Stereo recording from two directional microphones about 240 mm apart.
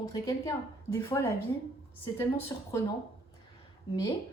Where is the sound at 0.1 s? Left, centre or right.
Centre.